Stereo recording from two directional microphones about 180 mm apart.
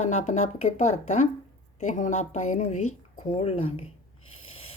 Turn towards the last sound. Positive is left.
turn(degrees=30)  # may be behind; listen again after turning